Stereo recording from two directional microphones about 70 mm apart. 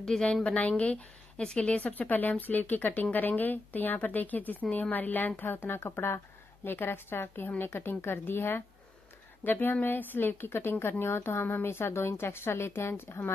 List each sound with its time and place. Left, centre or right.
0.0 s a woman's voice: centre; by 13.3 s left